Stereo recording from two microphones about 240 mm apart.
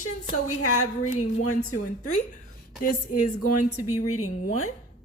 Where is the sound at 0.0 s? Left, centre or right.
Left.